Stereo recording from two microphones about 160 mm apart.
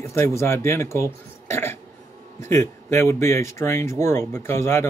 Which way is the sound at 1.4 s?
15° left (ahead or behind).